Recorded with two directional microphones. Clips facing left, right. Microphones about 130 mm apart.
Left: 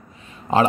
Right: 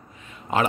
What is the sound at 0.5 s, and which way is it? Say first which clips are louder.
Speech: left 5 dB; 30° left (ahead or behind).